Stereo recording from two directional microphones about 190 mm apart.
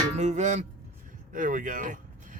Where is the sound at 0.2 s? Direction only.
40° right (ahead or behind).